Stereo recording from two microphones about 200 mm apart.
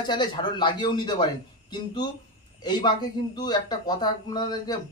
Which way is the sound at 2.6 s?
20° left (ahead or behind).